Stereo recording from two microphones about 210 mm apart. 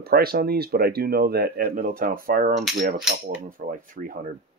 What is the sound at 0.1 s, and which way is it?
Speech, 45° right (ahead or behind).